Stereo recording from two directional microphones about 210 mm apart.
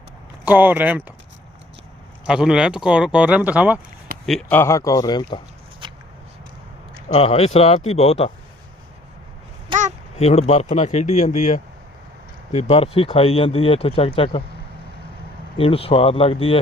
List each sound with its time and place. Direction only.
0.4 s speech: 10° right (ahead or behind)
2.2 s speech: 5° right (ahead or behind)
4.3 s speech: 5° left (ahead or behind)
5.8 s a sound: 25° right (ahead or behind)
7.1 s speech: 30° left (ahead or behind)
9.7 s a sound: 25° right (ahead or behind)
10.2 s speech: 30° left (ahead or behind)
15.5 s speech: 25° left (ahead or behind)